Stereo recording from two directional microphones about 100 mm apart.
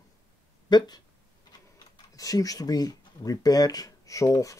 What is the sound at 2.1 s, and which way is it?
Speech, 35° left (ahead or behind).